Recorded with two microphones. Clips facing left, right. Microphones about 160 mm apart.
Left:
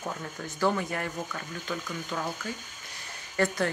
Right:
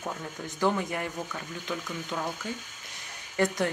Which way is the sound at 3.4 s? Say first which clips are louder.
Right 1 dB; 15° right (ahead or behind).